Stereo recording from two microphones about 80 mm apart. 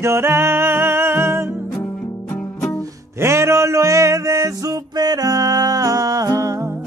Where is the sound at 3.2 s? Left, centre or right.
Right.